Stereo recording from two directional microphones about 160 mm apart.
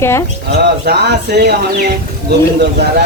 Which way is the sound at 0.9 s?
90° right.